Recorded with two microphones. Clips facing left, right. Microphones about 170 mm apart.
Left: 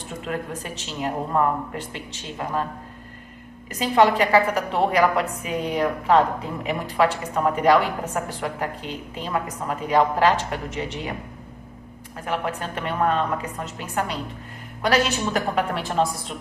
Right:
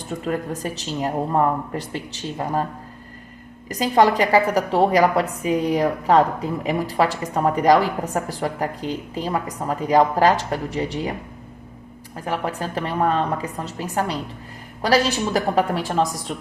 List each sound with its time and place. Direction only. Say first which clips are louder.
0.3 s a woman's voice: right 4 dB; 40° right (ahead or behind)
3.7 s a woman's voice: right 1 dB; 40° right (ahead or behind)
12.2 s a woman's voice: right 2 dB; 35° right (ahead or behind)